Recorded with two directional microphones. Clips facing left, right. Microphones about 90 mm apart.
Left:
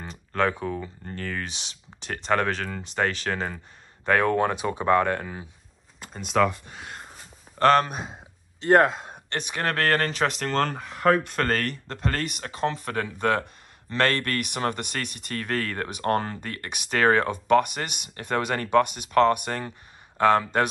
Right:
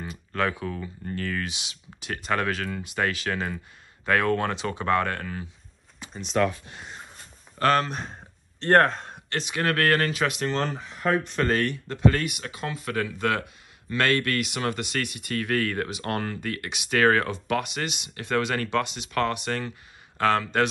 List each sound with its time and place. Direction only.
0.0 s speech: 30° left (ahead or behind)
4.0 s speech: 25° left (ahead or behind)
7.5 s speech: 35° left (ahead or behind)
7.8 s a sound: 10° left (ahead or behind)
9.5 s speech: 40° left (ahead or behind)
10.4 s speech: 50° left (ahead or behind); by 11.3 s 70° left (ahead or behind)
11.3 s speech: 45° left (ahead or behind); by 20.6 s 20° left (ahead or behind)